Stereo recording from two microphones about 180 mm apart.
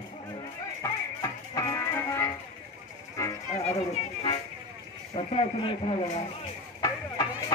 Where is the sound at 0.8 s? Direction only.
20° left (ahead or behind).